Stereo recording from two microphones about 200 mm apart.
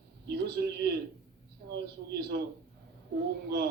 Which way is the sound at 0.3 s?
55° right (ahead or behind).